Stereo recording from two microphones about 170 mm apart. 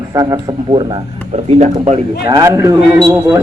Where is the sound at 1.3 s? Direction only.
40° right (ahead or behind).